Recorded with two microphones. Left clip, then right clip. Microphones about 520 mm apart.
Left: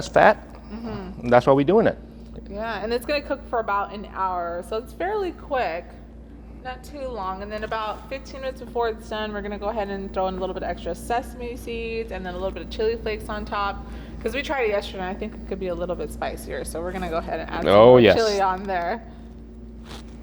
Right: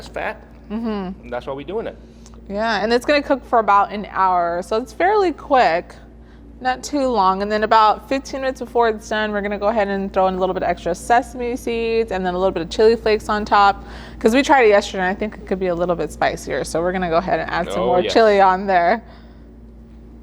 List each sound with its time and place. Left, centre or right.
0.0 s speech: left
0.7 s speech: right
1.3 s speech: left
2.5 s a woman's voice: right
6.6 s a woman's voice: right
17.7 s speech: left
18.1 s a woman's voice: right